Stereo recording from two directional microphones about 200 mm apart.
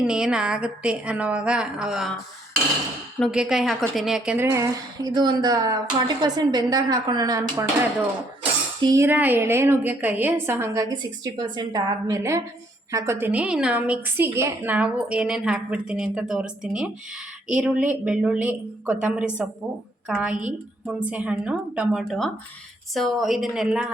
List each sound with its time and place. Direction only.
0.0 s a woman's voice: 5° right (ahead or behind)
3.2 s a woman's voice: centre (ahead or behind)